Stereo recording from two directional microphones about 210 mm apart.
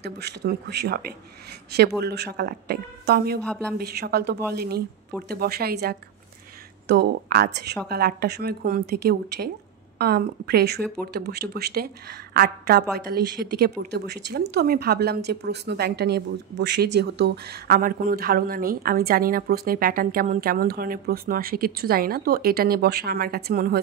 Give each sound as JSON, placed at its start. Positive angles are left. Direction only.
{"t": 0.0, "sound": "a woman's voice", "side_deg": -55}